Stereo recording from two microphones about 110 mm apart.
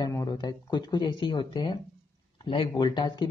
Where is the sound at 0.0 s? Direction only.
30° left (ahead or behind).